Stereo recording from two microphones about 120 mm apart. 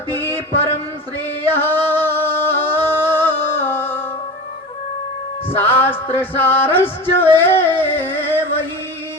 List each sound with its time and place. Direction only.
0.1 s a sound: 15° left (ahead or behind)
1.5 s singing: 20° left (ahead or behind)
5.5 s music: 20° left (ahead or behind)